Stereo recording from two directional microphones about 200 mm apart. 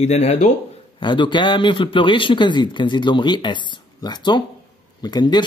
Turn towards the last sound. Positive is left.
turn(degrees=20)  # may be behind; listen again after turning